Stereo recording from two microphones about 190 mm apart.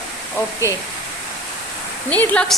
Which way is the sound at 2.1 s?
5° left (ahead or behind).